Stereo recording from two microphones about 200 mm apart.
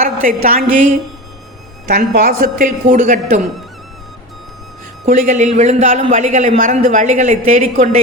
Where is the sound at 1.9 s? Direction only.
50° right (ahead or behind); by 3.5 s 35° right (ahead or behind).